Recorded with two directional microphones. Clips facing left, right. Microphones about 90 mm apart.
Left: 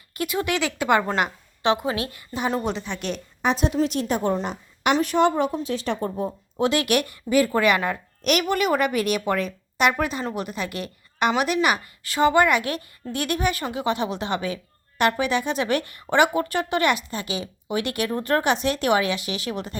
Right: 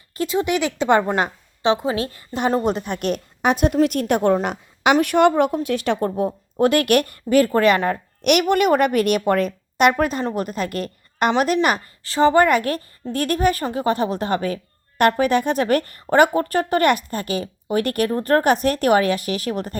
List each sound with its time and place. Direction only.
0.1 s a woman's voice: 30° right (ahead or behind)
2.7 s a woman's voice: 50° right (ahead or behind); by 6.1 s 70° right (ahead or behind)
6.1 s a woman's voice: 55° right (ahead or behind)
8.2 s a woman's voice: 65° right (ahead or behind); by 19.7 s 45° right (ahead or behind)